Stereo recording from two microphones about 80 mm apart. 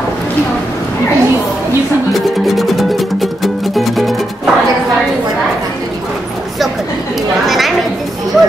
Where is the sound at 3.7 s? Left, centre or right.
Centre.